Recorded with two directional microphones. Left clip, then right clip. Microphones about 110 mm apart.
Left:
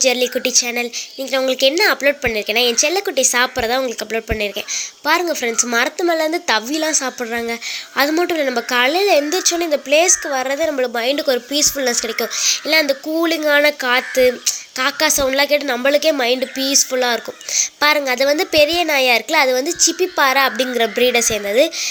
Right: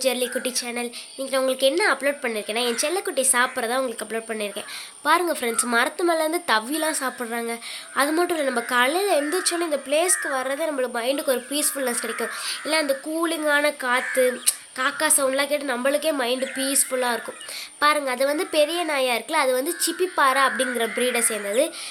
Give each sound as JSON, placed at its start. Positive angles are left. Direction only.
{"t": 0.0, "sound": "speech", "side_deg": 30}
{"t": 8.4, "sound": "speech", "side_deg": 30}
{"t": 11.9, "sound": "speech", "side_deg": 5}
{"t": 12.4, "sound": "speech", "side_deg": 40}